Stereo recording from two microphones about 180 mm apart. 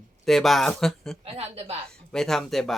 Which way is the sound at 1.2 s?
35° right (ahead or behind).